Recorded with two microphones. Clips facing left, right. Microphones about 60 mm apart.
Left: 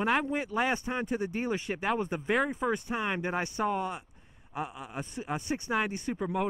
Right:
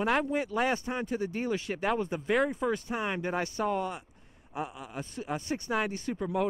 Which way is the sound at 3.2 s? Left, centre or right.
Centre.